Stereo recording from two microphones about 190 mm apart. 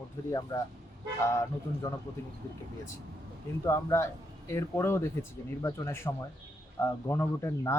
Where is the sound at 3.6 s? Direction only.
15° left (ahead or behind).